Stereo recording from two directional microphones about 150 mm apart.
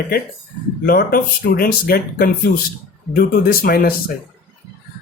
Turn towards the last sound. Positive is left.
turn(degrees=85)